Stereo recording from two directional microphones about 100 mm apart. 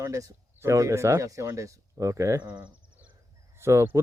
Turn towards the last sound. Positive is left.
turn(degrees=-30)  # may be behind; listen again after turning